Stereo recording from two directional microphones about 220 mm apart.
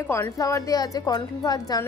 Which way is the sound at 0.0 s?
10° left (ahead or behind).